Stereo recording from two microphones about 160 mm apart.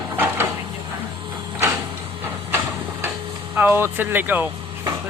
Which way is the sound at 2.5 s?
10° right (ahead or behind).